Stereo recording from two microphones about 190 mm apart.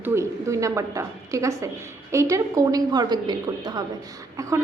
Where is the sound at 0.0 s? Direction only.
15° right (ahead or behind).